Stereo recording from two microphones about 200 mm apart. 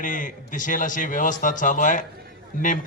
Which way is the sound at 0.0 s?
40° left (ahead or behind).